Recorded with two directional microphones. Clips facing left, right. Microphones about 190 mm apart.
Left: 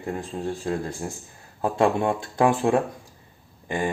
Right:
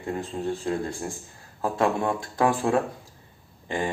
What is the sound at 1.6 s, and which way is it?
A man's voice, 25° left (ahead or behind).